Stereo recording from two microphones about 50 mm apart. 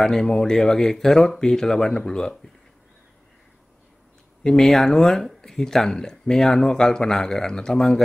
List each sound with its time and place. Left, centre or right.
0.0 s speech: centre
4.6 s speech: centre